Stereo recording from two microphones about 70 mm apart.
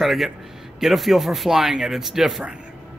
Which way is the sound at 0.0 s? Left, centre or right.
Centre.